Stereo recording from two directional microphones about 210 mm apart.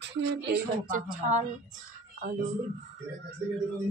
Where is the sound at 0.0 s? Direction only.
55° right (ahead or behind).